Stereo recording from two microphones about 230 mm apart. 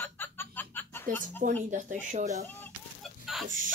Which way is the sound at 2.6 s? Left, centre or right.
Centre.